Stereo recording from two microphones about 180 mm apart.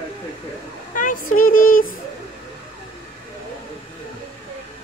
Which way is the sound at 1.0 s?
50° left (ahead or behind).